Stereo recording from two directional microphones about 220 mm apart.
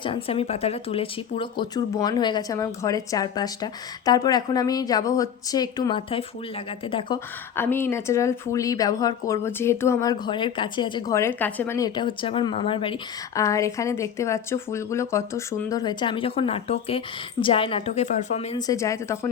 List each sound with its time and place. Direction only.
0.0 s a woman's voice: 25° left (ahead or behind)
7.5 s a woman's voice: 10° left (ahead or behind); by 18.6 s 30° left (ahead or behind)
18.6 s speech: 15° left (ahead or behind)